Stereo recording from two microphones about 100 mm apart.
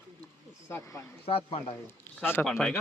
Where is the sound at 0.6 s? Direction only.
30° left (ahead or behind).